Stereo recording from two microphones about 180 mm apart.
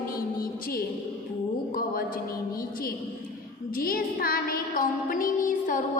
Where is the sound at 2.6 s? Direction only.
50° left (ahead or behind).